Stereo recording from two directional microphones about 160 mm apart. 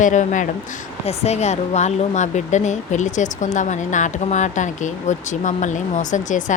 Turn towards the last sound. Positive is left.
turn(degrees=50)  # may be behind; listen again after turning